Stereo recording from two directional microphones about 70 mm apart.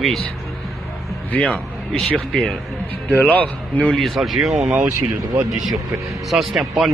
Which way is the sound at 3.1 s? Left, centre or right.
Left.